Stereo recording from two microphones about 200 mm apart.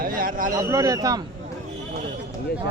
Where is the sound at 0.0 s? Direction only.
45° right (ahead or behind).